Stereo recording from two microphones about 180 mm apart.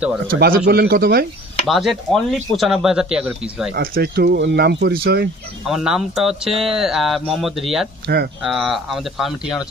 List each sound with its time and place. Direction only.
0.3 s speech: 50° right (ahead or behind)
1.7 s speech: centre (ahead or behind)
3.7 s speech: 55° right (ahead or behind)
5.7 s speech: 5° right (ahead or behind)